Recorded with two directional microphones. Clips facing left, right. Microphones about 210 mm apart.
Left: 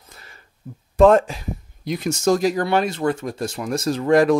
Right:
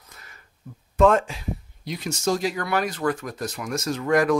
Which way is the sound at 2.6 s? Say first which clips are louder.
Left 4 dB; 25° left (ahead or behind).